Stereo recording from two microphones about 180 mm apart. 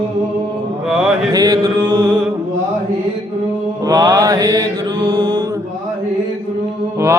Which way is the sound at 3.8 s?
20° right (ahead or behind).